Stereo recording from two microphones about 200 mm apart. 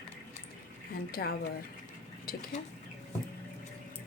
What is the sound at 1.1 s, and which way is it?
Speech, 50° left (ahead or behind).